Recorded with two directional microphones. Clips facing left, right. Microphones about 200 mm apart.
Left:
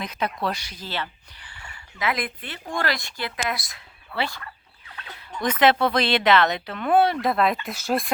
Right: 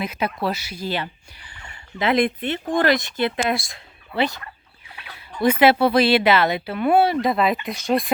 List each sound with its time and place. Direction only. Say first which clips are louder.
0.0 s speech: right 3 dB; 5° right (ahead or behind)
1.6 s speech: right 5 dB; 25° right (ahead or behind); by 8.1 s 5° left (ahead or behind)